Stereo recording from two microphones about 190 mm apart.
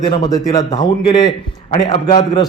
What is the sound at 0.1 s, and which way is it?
A man's voice, 20° left (ahead or behind).